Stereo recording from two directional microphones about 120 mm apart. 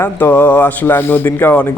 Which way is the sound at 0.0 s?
20° left (ahead or behind).